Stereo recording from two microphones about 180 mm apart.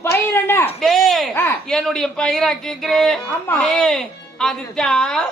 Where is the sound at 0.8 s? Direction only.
Centre (ahead or behind).